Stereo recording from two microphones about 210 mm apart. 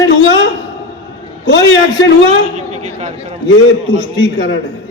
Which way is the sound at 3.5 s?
60° left (ahead or behind).